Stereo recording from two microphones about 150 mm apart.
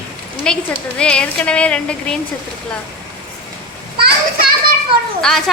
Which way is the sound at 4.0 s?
90° right.